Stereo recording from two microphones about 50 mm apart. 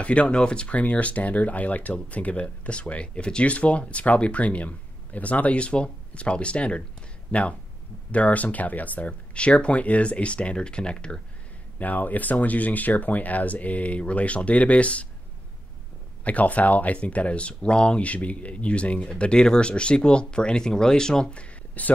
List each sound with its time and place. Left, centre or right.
0.0 s speech: left
11.8 s speech: left
16.3 s speech: left